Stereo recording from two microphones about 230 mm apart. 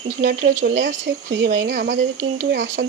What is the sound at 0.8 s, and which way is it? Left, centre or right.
A woman's voice, right.